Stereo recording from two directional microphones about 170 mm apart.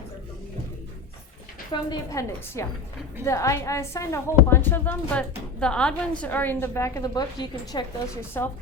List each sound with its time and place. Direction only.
1.7 s a woman's voice: 20° left (ahead or behind)
8.4 s a woman's voice: 10° left (ahead or behind)